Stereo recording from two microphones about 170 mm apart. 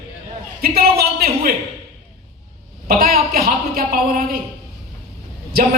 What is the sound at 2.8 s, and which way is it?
A man's voice, 65° right (ahead or behind).